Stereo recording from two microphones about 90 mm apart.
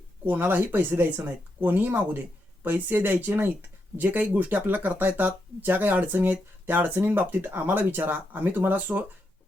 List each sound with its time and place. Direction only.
0.3 s speech: 20° right (ahead or behind)